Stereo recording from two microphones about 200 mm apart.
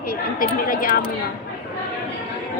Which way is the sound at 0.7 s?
45° left (ahead or behind).